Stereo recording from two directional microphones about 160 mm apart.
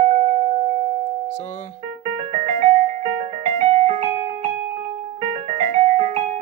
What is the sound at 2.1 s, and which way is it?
Music, 45° right (ahead or behind).